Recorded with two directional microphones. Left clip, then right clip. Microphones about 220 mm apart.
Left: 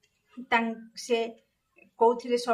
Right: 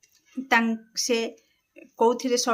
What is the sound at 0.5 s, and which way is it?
Speech, 50° right (ahead or behind).